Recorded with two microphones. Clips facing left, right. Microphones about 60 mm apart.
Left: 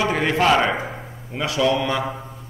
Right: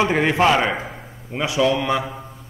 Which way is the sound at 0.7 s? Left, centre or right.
Centre.